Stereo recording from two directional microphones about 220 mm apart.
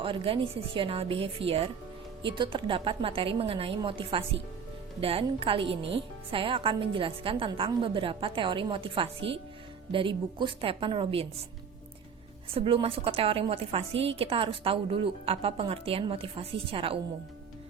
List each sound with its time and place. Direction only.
0.0 s a woman's voice: 25° right (ahead or behind)
12.5 s a woman's voice: 25° right (ahead or behind)